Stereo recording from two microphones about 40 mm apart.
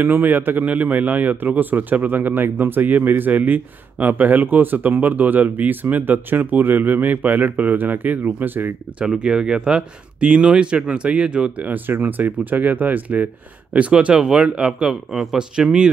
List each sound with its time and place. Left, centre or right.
0.0 s a man's voice: right
0.7 s a man's voice: right
9.0 s speech: right
11.5 s speech: right
11.9 s a man's voice: right
13.7 s speech: right
14.7 s a man's voice: centre